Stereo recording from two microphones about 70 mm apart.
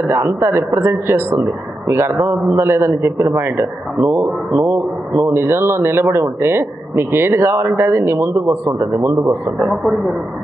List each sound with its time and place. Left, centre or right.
0.1 s speech: right
9.7 s speech: centre